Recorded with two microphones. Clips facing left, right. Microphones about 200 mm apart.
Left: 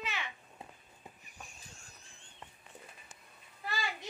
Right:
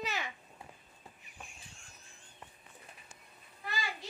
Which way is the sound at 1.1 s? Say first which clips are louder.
Left 2 dB; 15° left (ahead or behind).